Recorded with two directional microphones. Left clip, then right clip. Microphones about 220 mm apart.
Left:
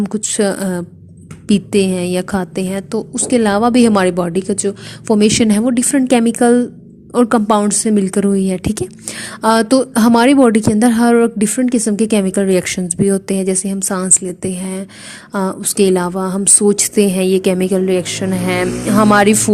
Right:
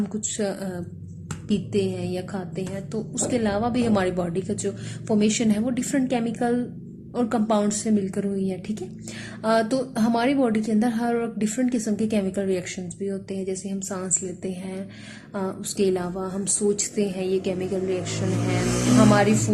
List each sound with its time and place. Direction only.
0.1 s a woman's voice: 40° left (ahead or behind)